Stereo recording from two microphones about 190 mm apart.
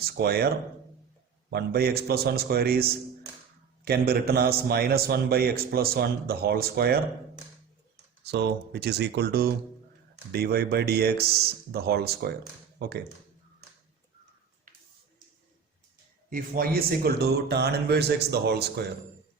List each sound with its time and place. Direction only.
0.0 s a man's voice: 55° right (ahead or behind)
8.2 s speech: 60° right (ahead or behind)
16.3 s speech: 50° right (ahead or behind)